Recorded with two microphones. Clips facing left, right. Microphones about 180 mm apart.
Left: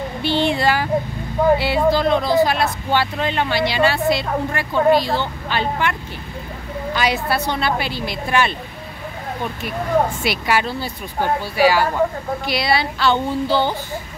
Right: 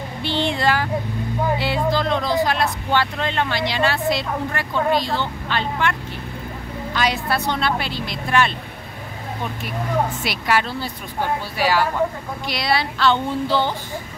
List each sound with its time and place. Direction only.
0.2 s speech: 5° left (ahead or behind)
7.0 s speech: 5° left (ahead or behind)
10.2 s speech: centre (ahead or behind)